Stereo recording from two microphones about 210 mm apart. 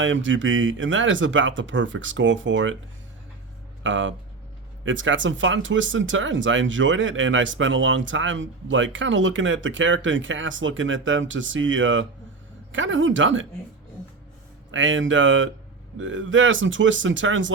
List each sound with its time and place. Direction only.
0.0 s speech: 65° right (ahead or behind)
3.8 s speech: 65° right (ahead or behind)
14.7 s speech: 65° right (ahead or behind)